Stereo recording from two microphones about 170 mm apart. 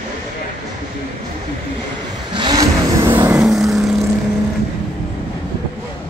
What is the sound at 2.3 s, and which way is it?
Vehicle, 25° right (ahead or behind).